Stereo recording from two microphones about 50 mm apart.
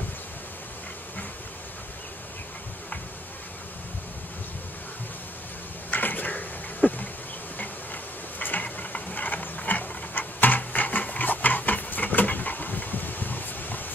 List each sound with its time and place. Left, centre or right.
5.9 s a sound: left
7.5 s mechanisms: left
8.6 s clock: left